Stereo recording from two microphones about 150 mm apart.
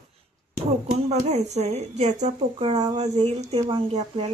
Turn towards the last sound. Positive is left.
turn(degrees=-45)  # may be behind; listen again after turning